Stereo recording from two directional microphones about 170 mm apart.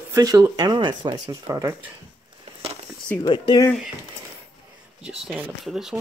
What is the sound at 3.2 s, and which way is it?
Speech, 25° left (ahead or behind).